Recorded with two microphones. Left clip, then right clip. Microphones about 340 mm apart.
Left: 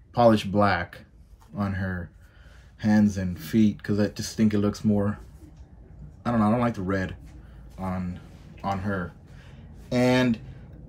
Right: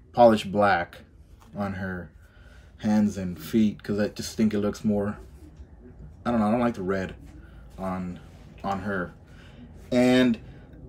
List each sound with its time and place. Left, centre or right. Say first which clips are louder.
0.1 s speech: right 2 dB; centre
6.2 s speech: even; centre
9.6 s a sound: right 2 dB; centre